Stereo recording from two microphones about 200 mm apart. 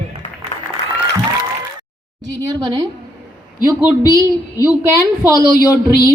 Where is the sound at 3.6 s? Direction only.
20° left (ahead or behind).